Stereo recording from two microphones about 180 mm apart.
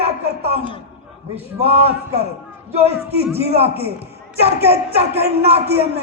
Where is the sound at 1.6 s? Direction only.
35° right (ahead or behind).